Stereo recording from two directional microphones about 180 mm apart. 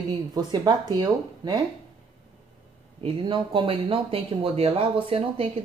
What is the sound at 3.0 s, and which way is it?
A woman's voice, 25° right (ahead or behind).